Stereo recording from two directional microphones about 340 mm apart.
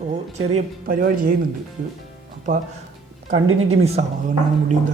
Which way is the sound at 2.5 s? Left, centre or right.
Right.